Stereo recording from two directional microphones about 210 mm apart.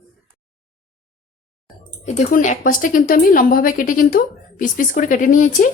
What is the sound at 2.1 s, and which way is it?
Speech, 35° left (ahead or behind).